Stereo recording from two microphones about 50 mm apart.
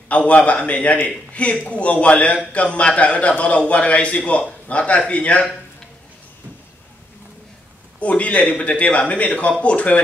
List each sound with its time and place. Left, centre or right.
0.1 s a man's voice: left
8.0 s a man's voice: left